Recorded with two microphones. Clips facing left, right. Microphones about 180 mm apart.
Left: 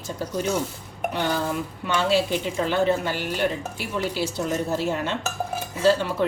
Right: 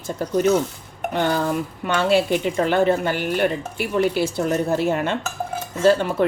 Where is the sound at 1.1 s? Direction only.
55° right (ahead or behind).